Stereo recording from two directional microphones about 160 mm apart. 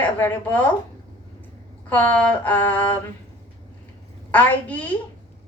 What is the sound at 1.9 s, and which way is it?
A woman's voice, 10° left (ahead or behind).